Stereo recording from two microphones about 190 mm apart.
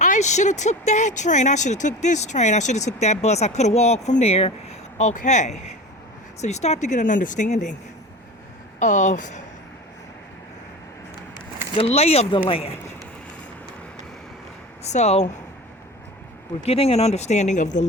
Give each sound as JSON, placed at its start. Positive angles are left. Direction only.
{"t": 0.0, "sound": "speech", "side_deg": 40}
{"t": 8.8, "sound": "speech", "side_deg": 40}
{"t": 11.8, "sound": "speech", "side_deg": 30}
{"t": 14.8, "sound": "speech", "side_deg": 35}
{"t": 16.6, "sound": "speech", "side_deg": 30}